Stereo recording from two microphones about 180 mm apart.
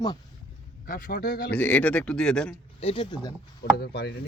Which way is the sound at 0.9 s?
55° left (ahead or behind).